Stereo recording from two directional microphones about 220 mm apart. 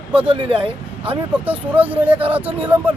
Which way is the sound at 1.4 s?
5° right (ahead or behind).